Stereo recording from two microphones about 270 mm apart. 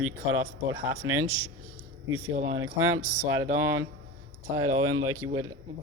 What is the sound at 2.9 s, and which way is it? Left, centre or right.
Speech, centre.